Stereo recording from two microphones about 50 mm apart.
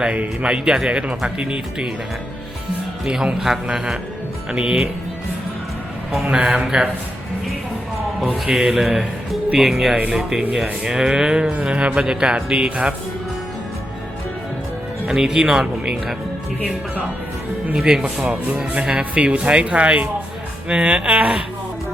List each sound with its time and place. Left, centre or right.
0.0 s speech: right
3.1 s speech: centre
6.2 s speech: centre
8.5 s a man's voice: centre
11.6 s speech: right
15.0 s speech: centre
17.7 s speech: centre
19.1 s speech: right